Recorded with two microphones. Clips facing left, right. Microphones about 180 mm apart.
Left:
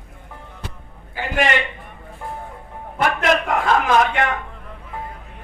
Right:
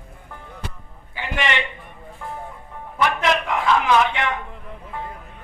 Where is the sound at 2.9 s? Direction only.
50° left (ahead or behind).